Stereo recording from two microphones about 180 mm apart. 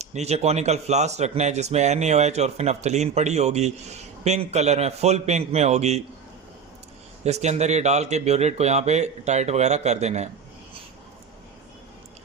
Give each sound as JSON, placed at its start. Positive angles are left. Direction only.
{"t": 0.0, "sound": "speech", "side_deg": -40}
{"t": 7.3, "sound": "speech", "side_deg": -40}